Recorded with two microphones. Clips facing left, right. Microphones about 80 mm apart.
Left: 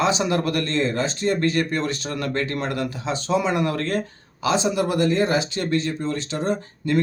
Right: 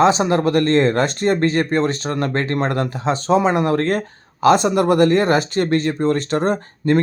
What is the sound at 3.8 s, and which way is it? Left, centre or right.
Speech, right.